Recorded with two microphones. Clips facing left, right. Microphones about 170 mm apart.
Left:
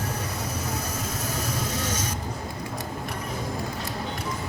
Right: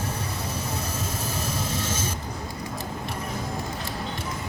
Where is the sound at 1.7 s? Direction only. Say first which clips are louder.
Even; 25° right (ahead or behind).